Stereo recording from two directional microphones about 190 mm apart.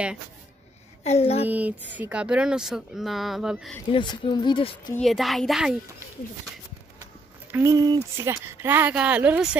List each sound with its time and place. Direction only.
1.0 s a woman's voice: 35° left (ahead or behind)
1.5 s speech: 10° right (ahead or behind)
3.9 s speech: 25° left (ahead or behind)
4.9 s speech: centre (ahead or behind)
7.5 s speech: 15° right (ahead or behind)